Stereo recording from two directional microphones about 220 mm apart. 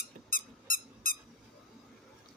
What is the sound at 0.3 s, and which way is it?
Squeak, 40° left (ahead or behind).